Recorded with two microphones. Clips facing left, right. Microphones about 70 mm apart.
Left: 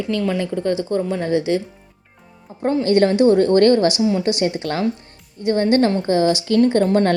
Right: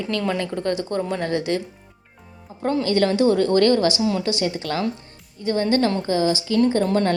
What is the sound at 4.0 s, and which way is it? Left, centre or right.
Speech, centre.